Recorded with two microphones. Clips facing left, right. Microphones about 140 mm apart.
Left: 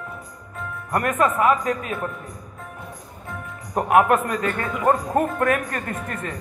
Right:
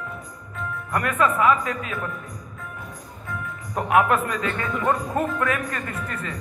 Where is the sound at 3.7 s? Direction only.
45° left (ahead or behind).